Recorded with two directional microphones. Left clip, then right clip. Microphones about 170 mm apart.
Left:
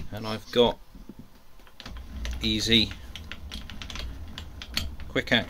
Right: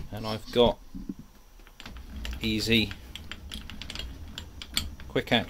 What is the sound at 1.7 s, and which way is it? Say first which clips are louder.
Typing: left 2 dB; 20° right (ahead or behind).